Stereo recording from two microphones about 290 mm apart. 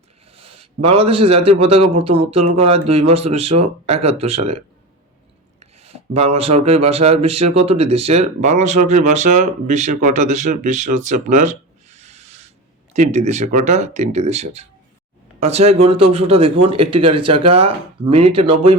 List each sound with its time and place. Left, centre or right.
0.3 s a man's voice: centre